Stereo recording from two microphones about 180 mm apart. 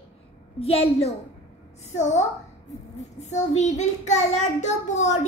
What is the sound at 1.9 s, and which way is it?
Speech, 40° left (ahead or behind).